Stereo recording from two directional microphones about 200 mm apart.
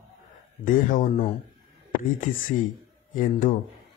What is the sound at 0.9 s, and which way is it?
Speech, 40° left (ahead or behind).